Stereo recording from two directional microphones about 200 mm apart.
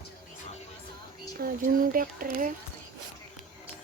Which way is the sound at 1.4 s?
45° right (ahead or behind).